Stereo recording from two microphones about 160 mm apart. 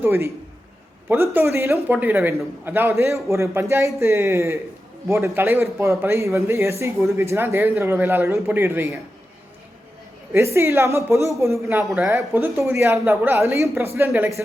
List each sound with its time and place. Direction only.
0.0 s speech: 15° right (ahead or behind)
10.3 s speech: 15° right (ahead or behind)